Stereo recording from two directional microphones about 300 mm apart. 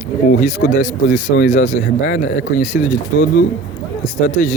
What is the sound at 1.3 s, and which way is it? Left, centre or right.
Speech, left.